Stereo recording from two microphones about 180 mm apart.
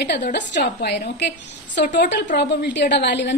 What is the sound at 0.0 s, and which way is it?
A woman's voice, 70° left (ahead or behind).